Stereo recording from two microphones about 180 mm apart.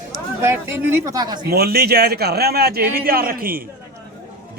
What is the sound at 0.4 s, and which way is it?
Speech, 10° right (ahead or behind).